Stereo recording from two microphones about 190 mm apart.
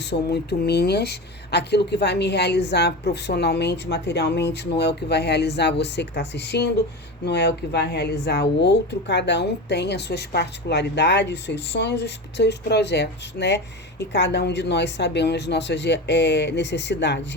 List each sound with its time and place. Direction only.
0.0 s a woman's voice: 60° left (ahead or behind)